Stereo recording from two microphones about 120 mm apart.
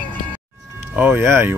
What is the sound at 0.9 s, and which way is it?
Speech, 20° right (ahead or behind).